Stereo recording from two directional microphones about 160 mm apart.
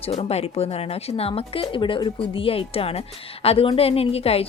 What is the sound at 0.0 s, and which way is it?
A woman's voice, 40° left (ahead or behind).